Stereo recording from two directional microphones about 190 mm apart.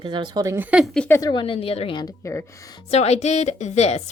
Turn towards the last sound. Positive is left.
turn(degrees=35)  # may be behind; listen again after turning